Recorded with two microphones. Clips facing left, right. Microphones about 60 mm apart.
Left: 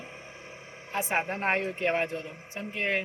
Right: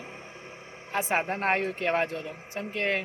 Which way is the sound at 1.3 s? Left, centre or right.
Centre.